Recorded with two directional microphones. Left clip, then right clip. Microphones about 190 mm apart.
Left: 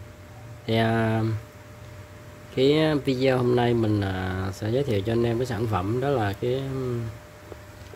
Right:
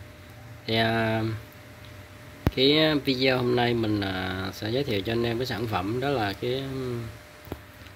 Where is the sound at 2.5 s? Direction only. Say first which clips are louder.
Even; 10° left (ahead or behind).